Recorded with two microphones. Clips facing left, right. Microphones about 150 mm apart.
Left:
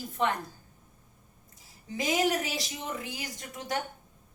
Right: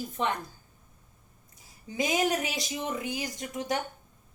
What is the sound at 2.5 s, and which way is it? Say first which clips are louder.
A woman's voice: right 3 dB; 20° right (ahead or behind).